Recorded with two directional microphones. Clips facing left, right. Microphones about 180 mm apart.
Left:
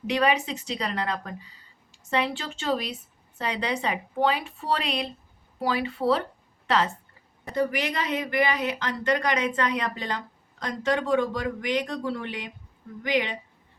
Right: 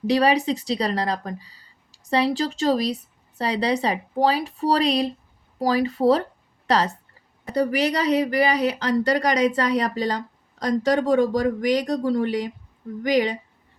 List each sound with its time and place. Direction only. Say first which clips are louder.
0.1 s speech: right 5 dB; 35° right (ahead or behind)